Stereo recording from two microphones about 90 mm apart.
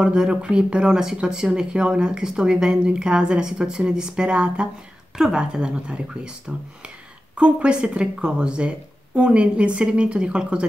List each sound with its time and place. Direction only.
0.0 s speech: 10° right (ahead or behind)
7.3 s speech: 15° right (ahead or behind)